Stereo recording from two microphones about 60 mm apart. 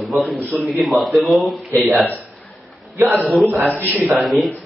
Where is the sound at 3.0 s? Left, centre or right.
Centre.